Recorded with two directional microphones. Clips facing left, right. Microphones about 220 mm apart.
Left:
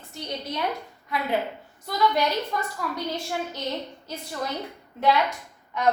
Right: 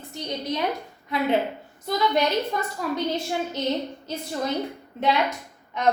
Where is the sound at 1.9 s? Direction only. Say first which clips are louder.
Right 2 dB; 20° right (ahead or behind).